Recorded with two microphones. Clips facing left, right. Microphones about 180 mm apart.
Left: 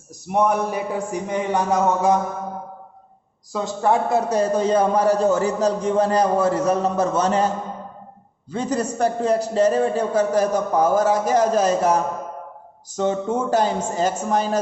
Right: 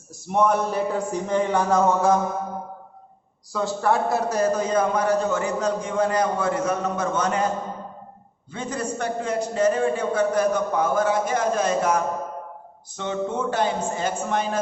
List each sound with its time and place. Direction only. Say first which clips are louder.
0.3 s speech: left 1 dB; 15° left (ahead or behind)
3.5 s a man's voice: left 2 dB; 20° left (ahead or behind)
8.5 s a man's voice: left 5 dB; 40° left (ahead or behind)